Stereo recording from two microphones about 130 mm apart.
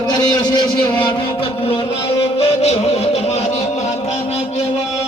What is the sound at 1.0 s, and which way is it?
Music, 40° left (ahead or behind).